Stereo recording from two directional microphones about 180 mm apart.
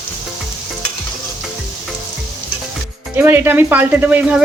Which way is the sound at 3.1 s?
10° right (ahead or behind).